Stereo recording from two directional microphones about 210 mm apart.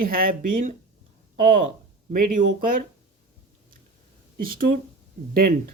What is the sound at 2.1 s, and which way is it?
Speech, 40° right (ahead or behind).